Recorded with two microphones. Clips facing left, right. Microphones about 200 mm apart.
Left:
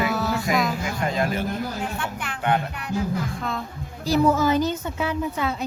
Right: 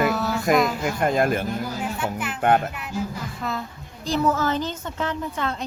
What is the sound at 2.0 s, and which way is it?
Speech, 5° right (ahead or behind).